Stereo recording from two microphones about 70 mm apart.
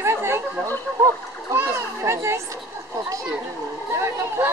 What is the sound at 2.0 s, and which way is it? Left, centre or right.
Speech, right.